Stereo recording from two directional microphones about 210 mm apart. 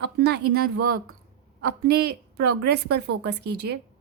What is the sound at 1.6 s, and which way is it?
A woman's voice, 50° right (ahead or behind).